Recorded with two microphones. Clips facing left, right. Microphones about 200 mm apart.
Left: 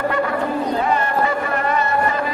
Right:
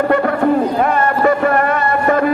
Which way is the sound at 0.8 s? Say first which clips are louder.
Right 4 dB; 55° right (ahead or behind).